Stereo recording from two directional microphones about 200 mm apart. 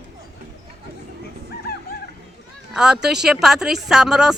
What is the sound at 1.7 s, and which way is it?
Music, 50° left (ahead or behind).